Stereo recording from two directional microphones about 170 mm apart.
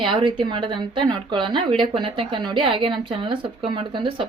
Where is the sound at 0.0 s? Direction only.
30° right (ahead or behind).